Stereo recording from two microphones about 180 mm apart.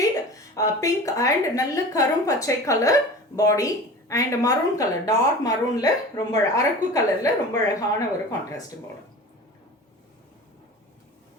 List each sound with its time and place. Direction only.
0.0 s a woman's voice: 20° left (ahead or behind)